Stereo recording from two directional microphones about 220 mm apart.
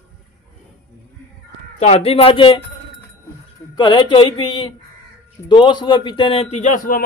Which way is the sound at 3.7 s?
20° left (ahead or behind).